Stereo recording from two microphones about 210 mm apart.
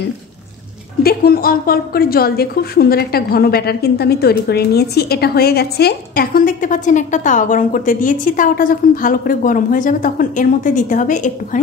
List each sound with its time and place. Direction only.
1.0 s a woman's voice: 45° left (ahead or behind)